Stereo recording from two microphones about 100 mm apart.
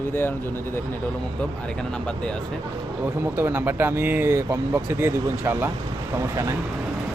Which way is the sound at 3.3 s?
25° right (ahead or behind).